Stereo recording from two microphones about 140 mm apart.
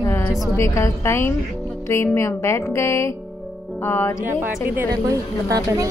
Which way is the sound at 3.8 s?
15° left (ahead or behind).